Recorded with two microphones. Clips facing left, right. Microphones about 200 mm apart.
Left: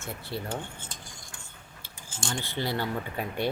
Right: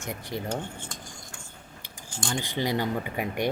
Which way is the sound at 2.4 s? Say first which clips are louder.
Right 3 dB; 15° right (ahead or behind).